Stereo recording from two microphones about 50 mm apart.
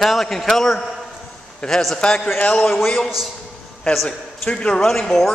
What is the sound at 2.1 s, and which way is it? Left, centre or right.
Speech, left.